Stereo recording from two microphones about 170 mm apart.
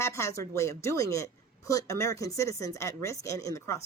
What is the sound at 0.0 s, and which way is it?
A woman's voice, 15° left (ahead or behind).